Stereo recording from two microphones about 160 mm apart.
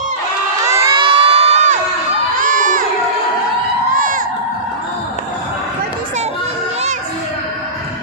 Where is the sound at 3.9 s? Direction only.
55° right (ahead or behind).